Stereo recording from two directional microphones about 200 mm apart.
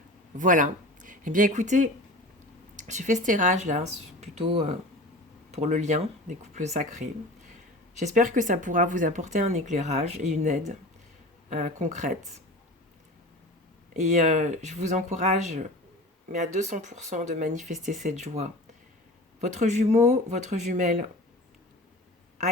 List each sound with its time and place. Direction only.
0.3 s speech: 40° right (ahead or behind)
13.9 s speech: 40° right (ahead or behind)